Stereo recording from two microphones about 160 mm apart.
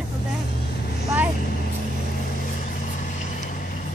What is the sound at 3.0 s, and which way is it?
Vehicle, 55° left (ahead or behind).